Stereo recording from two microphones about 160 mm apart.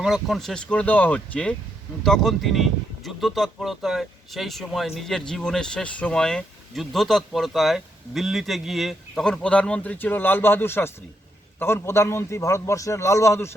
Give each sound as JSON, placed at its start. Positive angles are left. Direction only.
{"t": 0.0, "sound": "a man's voice", "side_deg": 0}